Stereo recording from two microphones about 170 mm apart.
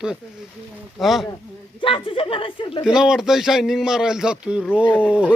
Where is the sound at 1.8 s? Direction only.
30° left (ahead or behind).